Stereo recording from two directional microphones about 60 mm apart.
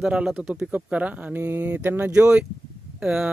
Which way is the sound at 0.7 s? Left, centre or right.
Right.